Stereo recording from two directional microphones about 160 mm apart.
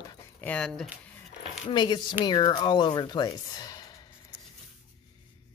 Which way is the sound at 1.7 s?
25° left (ahead or behind).